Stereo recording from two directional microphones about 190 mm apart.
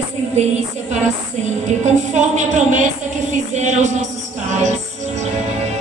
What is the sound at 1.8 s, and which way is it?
Music, 40° right (ahead or behind).